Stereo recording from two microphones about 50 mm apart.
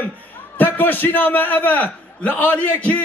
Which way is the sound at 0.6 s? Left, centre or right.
Left.